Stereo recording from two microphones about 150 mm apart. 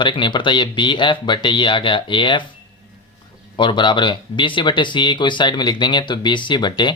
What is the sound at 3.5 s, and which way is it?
Speech, 35° left (ahead or behind).